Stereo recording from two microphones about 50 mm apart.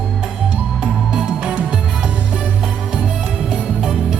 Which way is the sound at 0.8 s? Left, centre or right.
Centre.